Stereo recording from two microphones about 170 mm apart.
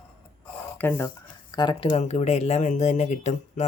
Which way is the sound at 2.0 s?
40° left (ahead or behind).